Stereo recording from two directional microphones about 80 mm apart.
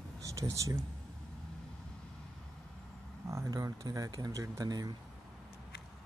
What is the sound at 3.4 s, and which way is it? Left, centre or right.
Speech, right.